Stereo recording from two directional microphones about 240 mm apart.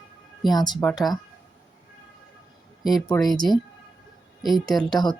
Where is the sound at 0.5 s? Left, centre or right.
Centre.